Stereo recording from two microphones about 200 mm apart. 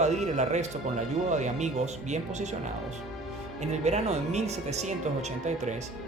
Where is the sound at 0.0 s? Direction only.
35° right (ahead or behind).